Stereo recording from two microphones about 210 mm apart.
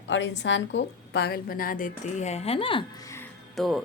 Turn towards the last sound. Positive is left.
turn(degrees=0)  # may be behind; listen again after turning